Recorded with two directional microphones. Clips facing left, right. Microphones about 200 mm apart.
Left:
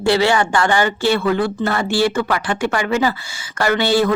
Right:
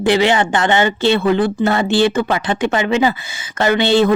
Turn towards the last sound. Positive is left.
turn(degrees=-25)  # may be behind; listen again after turning